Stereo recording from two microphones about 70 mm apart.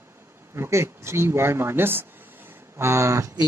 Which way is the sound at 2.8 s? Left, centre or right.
Right.